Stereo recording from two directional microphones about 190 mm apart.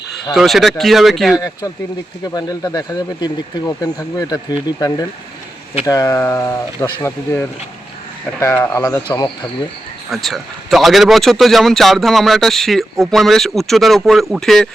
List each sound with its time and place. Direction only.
0.3 s a man's voice: centre (ahead or behind)
1.4 s speech: 20° left (ahead or behind)
9.0 s speech: 25° left (ahead or behind)
10.1 s a man's voice: centre (ahead or behind)